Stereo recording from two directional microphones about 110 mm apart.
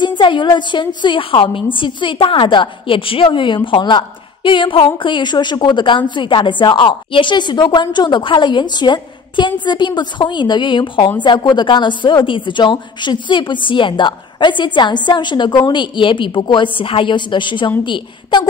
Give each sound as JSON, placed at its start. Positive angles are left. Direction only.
{"t": 0.0, "sound": "a woman's voice", "side_deg": 45}